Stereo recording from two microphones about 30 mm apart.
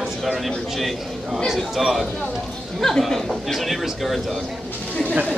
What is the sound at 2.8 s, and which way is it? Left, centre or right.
Speech, centre.